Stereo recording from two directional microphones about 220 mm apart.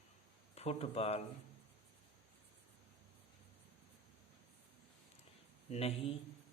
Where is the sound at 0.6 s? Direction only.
30° left (ahead or behind).